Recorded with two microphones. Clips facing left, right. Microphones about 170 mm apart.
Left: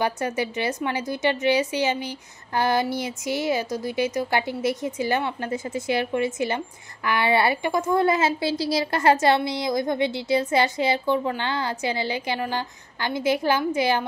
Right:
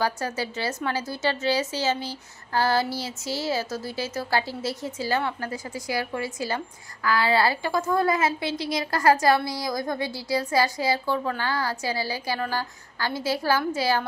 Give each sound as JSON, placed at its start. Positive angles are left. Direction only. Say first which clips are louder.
{"t": 0.0, "sound": "a woman's voice", "louder": "left 2 dB", "side_deg": 20}